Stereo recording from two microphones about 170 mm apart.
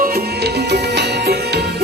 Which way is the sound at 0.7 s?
75° right (ahead or behind).